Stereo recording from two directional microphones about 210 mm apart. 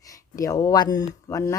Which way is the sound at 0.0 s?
15° left (ahead or behind).